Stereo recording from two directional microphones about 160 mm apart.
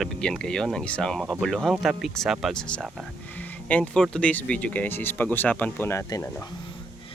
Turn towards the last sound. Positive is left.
turn(degrees=20)  # may be behind; listen again after turning